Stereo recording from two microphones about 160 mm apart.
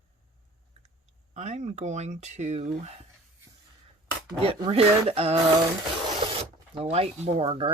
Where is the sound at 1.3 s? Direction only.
45° right (ahead or behind).